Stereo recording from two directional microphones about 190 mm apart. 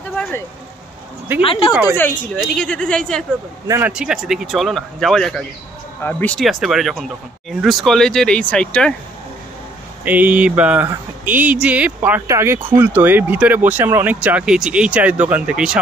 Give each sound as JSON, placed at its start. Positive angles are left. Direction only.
{"t": 0.1, "sound": "vehicle", "side_deg": 10}
{"t": 1.4, "sound": "speech", "side_deg": 30}
{"t": 1.7, "sound": "speech", "side_deg": -10}
{"t": 2.0, "sound": "speech", "side_deg": 10}
{"t": 3.6, "sound": "speech", "side_deg": -15}
{"t": 3.9, "sound": "speech", "side_deg": -5}
{"t": 10.0, "sound": "speech", "side_deg": -10}